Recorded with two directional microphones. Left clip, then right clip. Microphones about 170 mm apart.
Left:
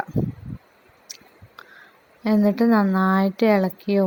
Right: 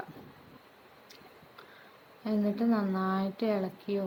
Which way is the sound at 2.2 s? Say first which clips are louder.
Left 11 dB; 55° left (ahead or behind).